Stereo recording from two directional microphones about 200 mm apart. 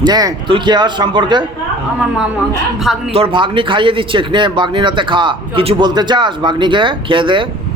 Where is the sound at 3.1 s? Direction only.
30° right (ahead or behind).